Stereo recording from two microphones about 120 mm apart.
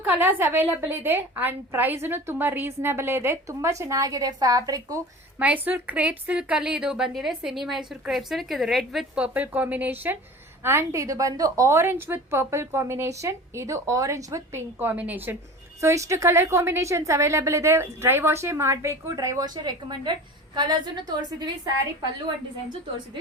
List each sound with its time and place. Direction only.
0.0 s a woman's voice: 15° right (ahead or behind)
5.4 s a woman's voice: 10° right (ahead or behind); by 21.7 s 35° right (ahead or behind)